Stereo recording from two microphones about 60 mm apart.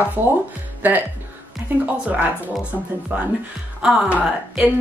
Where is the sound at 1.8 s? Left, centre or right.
Right.